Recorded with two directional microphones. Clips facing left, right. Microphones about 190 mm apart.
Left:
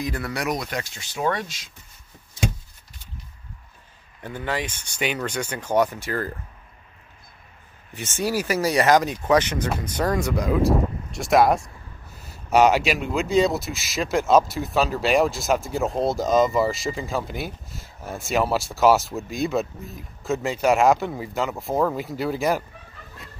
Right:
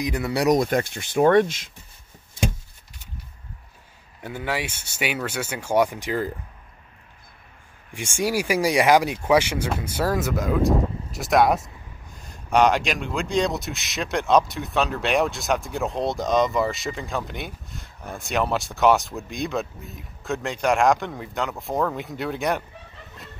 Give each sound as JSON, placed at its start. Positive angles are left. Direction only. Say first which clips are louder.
{"t": 0.0, "sound": "speech", "louder": "right 2 dB", "side_deg": -20}
{"t": 0.3, "sound": "speech", "louder": "right 10 dB", "side_deg": -30}
{"t": 0.6, "sound": "speech", "louder": "right 9 dB", "side_deg": -50}
{"t": 4.2, "sound": "speech", "louder": "even", "side_deg": -10}
{"t": 7.9, "sound": "speech", "louder": "right 1 dB", "side_deg": -10}